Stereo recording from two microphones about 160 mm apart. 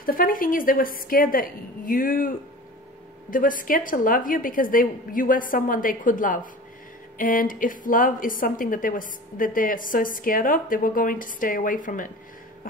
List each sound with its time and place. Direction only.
0.0 s a woman's voice: 60° left (ahead or behind)